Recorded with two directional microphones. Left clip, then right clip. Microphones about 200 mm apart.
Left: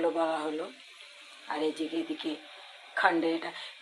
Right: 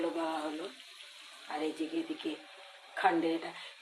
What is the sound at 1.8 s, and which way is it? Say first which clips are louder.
Speech: left 3 dB; 20° left (ahead or behind).